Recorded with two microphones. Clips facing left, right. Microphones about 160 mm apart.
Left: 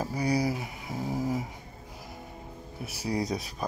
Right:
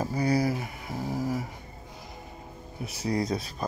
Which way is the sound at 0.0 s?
10° left (ahead or behind).